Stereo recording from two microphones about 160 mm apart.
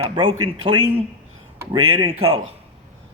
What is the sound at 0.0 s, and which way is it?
Speech, 35° right (ahead or behind).